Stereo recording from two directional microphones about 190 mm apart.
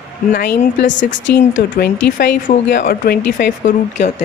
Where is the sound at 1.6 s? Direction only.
55° left (ahead or behind).